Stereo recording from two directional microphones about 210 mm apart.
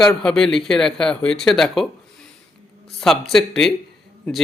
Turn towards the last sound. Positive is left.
turn(degrees=0)  # may be behind; listen again after turning